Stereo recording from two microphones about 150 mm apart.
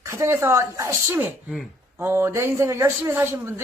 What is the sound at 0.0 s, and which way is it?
Speech, 15° right (ahead or behind).